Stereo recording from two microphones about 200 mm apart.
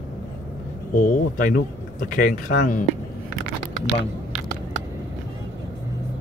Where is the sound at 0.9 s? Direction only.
45° left (ahead or behind).